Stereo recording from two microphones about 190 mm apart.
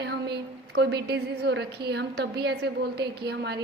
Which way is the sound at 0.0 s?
60° right (ahead or behind).